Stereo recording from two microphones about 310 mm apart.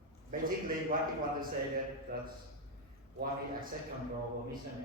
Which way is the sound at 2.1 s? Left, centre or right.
Right.